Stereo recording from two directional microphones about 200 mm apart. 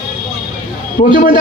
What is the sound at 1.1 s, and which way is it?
Speech, 45° left (ahead or behind).